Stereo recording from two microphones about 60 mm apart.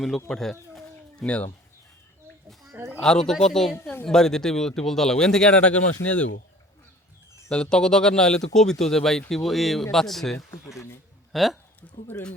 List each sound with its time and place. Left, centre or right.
0.3 s speech: centre
0.7 s chicken: centre
3.0 s speech: centre
7.5 s speech: centre
11.8 s speech: left